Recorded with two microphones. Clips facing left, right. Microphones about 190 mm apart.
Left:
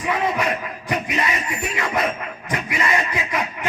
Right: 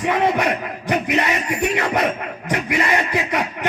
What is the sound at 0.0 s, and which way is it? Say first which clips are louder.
Speech: right 4 dB; 70° right (ahead or behind).